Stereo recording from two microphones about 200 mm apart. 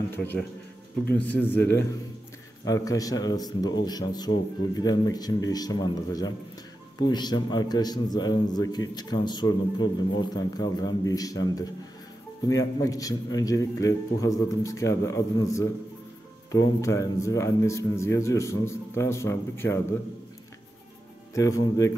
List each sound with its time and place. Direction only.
1.0 s a man's voice: 5° left (ahead or behind)
21.4 s a man's voice: 15° left (ahead or behind)